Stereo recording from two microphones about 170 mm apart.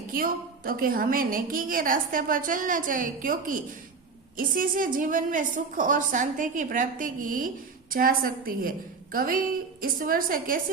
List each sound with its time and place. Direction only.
0.1 s a woman's voice: 55° right (ahead or behind)